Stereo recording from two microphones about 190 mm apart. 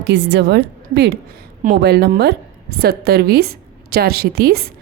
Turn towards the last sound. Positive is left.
turn(degrees=-55)  # may be behind; listen again after turning